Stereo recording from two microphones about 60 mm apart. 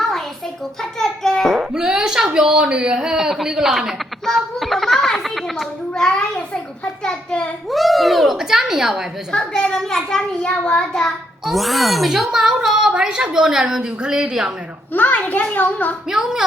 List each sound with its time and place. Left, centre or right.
0.8 s a child's voice: centre
1.5 s a woman's voice: centre
4.4 s a sound: centre
5.9 s a child's voice: centre
7.7 s a child's voice: centre
9.3 s a woman's voice: centre
11.4 s a woman's voice: centre
14.9 s a child's voice: left
16.0 s a woman's voice: centre